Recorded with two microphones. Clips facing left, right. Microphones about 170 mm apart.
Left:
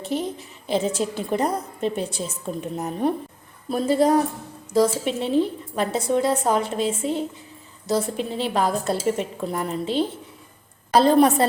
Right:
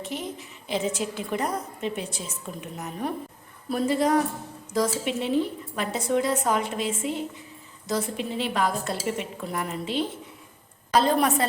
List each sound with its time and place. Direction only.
0.0 s a woman's voice: 30° left (ahead or behind)